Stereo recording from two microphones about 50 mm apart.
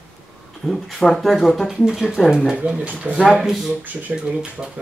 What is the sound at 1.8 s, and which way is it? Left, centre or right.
Speech, centre.